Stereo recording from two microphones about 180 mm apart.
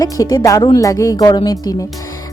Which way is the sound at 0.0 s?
20° left (ahead or behind).